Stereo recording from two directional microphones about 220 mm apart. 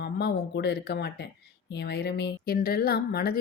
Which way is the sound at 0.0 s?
50° left (ahead or behind).